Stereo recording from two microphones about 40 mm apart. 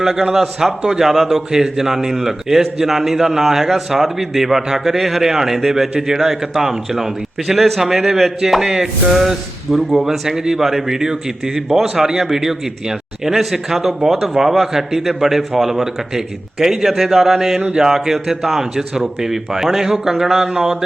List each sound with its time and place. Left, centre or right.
0.0 s a man's voice: centre